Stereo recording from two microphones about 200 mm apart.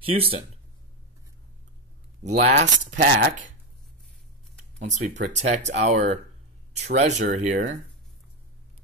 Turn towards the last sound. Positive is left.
turn(degrees=-40)  # may be behind; listen again after turning